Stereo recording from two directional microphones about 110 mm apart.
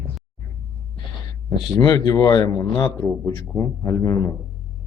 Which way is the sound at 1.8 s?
35° left (ahead or behind).